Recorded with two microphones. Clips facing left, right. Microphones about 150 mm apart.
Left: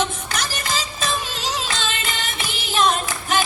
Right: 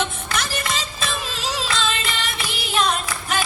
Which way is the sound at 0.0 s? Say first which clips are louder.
Left 1 dB; 35° left (ahead or behind).